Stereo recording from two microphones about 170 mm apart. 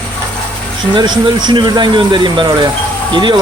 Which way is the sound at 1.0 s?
25° right (ahead or behind).